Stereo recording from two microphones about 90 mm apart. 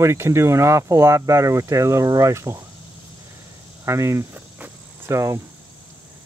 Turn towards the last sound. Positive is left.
turn(degrees=-35)  # may be behind; listen again after turning